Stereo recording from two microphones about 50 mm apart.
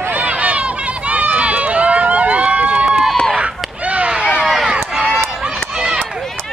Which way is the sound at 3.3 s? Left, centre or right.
Right.